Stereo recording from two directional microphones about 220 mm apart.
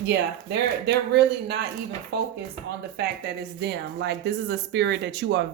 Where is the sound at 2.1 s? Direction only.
50° right (ahead or behind).